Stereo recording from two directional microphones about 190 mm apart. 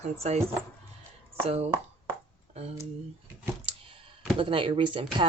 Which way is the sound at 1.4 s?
30° right (ahead or behind).